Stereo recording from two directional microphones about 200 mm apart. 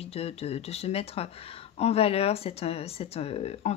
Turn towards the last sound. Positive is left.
turn(degrees=30)  # may be behind; listen again after turning